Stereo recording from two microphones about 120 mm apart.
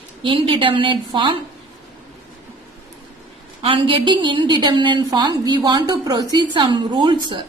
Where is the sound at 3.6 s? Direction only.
45° right (ahead or behind).